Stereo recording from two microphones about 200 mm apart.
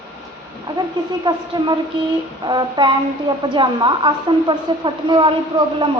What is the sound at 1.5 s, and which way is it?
A woman's voice, 20° right (ahead or behind).